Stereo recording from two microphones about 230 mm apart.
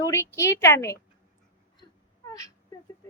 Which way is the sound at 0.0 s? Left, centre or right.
Centre.